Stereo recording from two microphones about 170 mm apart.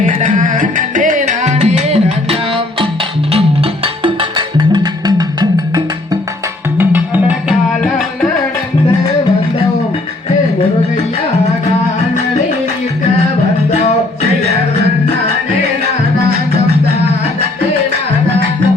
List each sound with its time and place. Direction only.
0.0 s music: 50° right (ahead or behind); by 5.8 s 25° right (ahead or behind)
6.7 s tabla: 10° right (ahead or behind)